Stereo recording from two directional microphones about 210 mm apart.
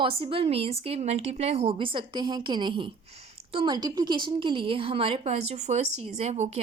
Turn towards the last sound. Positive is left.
turn(degrees=-30)  # may be behind; listen again after turning